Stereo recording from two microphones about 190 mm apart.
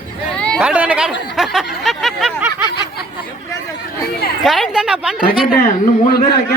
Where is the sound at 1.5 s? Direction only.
Centre (ahead or behind).